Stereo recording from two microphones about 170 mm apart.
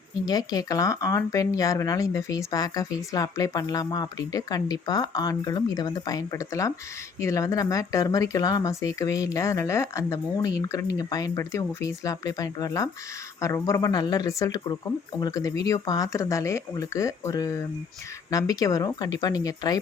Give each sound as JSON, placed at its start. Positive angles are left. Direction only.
{"t": 0.3, "sound": "speech", "side_deg": 20}